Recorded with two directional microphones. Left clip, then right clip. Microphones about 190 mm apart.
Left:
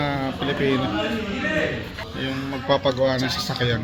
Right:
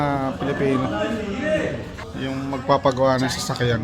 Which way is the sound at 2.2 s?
10° right (ahead or behind).